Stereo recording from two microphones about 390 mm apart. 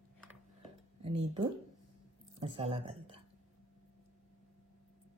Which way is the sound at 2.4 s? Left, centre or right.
Centre.